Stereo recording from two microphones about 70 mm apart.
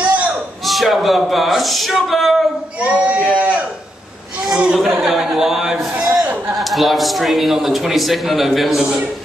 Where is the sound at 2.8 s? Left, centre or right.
Centre.